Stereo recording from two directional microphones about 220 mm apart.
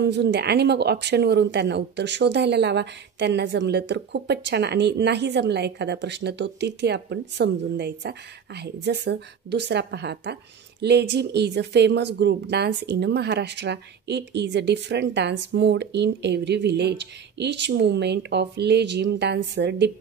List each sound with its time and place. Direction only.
0.0 s speech: 50° right (ahead or behind)